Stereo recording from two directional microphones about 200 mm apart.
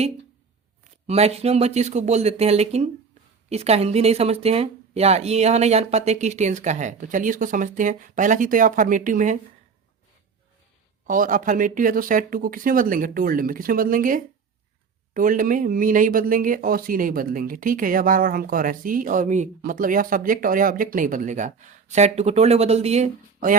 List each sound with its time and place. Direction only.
1.0 s speech: 30° right (ahead or behind)
11.0 s speech: 40° right (ahead or behind)